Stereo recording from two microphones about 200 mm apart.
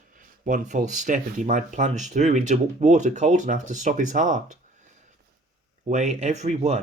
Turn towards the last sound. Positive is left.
turn(degrees=-35)  # may be behind; listen again after turning